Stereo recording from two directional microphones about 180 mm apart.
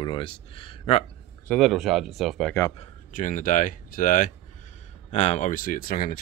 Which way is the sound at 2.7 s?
40° left (ahead or behind).